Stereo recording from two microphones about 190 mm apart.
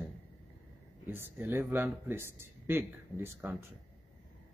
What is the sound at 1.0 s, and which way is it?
Speech, 10° right (ahead or behind).